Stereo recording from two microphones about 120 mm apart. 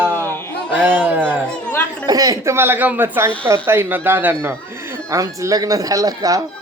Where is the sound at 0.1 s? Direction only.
20° left (ahead or behind).